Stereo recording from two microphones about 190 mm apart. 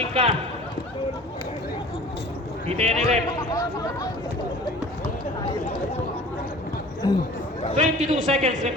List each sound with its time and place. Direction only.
0.1 s speech: 30° right (ahead or behind)
2.6 s a man's voice: 35° right (ahead or behind)
3.3 s speech: 20° left (ahead or behind)
7.0 s speech: 20° left (ahead or behind)
7.8 s a man's voice: 40° right (ahead or behind)